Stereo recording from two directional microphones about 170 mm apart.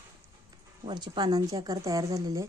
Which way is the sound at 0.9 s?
25° right (ahead or behind).